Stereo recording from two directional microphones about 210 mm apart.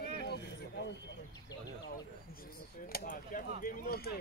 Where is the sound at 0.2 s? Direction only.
50° left (ahead or behind).